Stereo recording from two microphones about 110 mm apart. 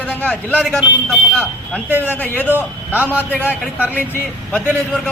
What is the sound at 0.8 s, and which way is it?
Speech, centre (ahead or behind).